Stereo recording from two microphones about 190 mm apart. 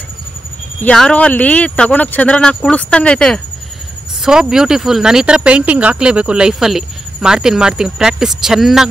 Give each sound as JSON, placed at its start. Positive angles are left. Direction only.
{"t": 0.8, "sound": "speech", "side_deg": 5}